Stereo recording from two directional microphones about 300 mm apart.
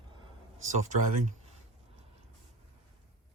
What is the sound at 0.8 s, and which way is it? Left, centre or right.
Speech, right.